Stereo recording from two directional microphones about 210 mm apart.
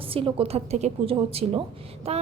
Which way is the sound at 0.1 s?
25° right (ahead or behind).